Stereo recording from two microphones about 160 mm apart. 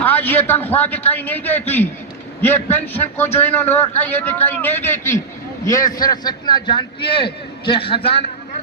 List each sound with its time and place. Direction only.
0.0 s a man's voice: 10° left (ahead or behind); by 8.1 s 35° left (ahead or behind)